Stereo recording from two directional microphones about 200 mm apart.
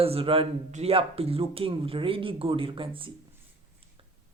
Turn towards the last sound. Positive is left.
turn(degrees=-25)  # may be behind; listen again after turning